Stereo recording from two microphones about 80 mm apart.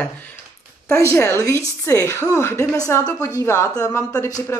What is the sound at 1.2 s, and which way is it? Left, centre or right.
Speech, left.